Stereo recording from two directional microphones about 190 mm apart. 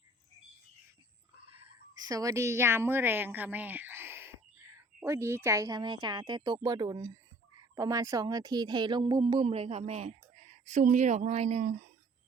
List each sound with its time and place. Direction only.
2.0 s a woman's voice: 20° right (ahead or behind); by 11.8 s 40° right (ahead or behind)